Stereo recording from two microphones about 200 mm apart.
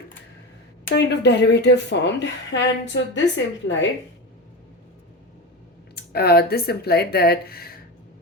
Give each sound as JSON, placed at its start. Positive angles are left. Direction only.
{"t": 0.9, "sound": "a woman's voice", "side_deg": 55}
{"t": 5.9, "sound": "speech", "side_deg": 50}